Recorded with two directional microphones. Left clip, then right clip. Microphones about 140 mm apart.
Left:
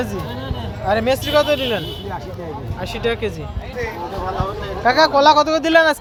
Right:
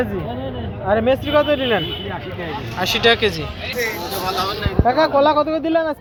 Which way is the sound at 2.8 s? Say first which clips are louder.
Right 7 dB; 5° right (ahead or behind).